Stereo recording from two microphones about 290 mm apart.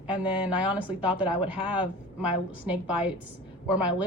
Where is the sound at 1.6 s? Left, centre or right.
Centre.